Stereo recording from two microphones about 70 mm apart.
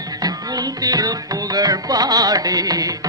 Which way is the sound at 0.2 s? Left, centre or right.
Right.